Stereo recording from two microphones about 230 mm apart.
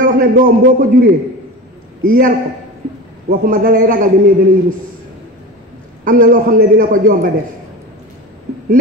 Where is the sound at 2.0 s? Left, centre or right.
Right.